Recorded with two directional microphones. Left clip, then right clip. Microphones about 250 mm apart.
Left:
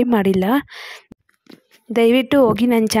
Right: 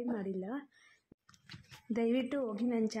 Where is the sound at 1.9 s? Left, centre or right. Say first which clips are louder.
Left 19 dB; left.